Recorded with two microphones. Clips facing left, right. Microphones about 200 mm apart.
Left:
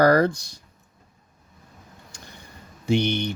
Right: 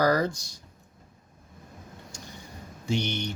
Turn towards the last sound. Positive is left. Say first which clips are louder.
# left 7 dB
turn(degrees=60)  # may be behind; listen again after turning